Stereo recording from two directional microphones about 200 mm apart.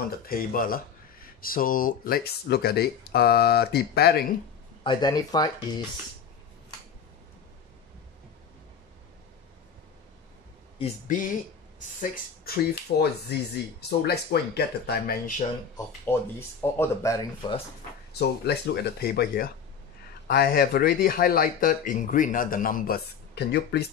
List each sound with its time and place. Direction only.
0.3 s speech: 45° left (ahead or behind)
4.8 s speech: 20° left (ahead or behind)
10.8 s speech: 40° left (ahead or behind)
13.0 s speech: 55° left (ahead or behind)
16.1 s speech: 10° left (ahead or behind)
18.2 s speech: 55° left (ahead or behind)